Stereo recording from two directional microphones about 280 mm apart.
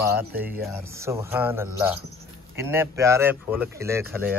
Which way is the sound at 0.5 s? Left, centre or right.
Centre.